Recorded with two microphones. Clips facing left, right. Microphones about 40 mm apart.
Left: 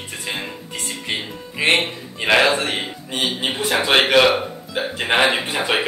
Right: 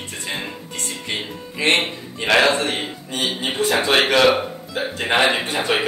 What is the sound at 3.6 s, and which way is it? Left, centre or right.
Speech, centre.